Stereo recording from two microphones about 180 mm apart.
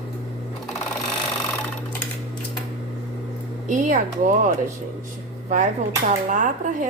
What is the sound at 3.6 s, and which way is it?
Speech, 45° right (ahead or behind).